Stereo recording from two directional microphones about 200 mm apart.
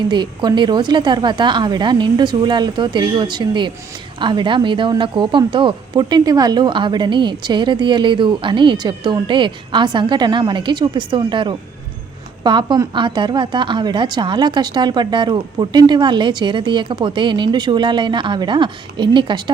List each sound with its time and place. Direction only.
0.1 s speech: 20° right (ahead or behind)